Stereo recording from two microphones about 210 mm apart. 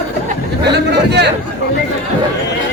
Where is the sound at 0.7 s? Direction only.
50° right (ahead or behind).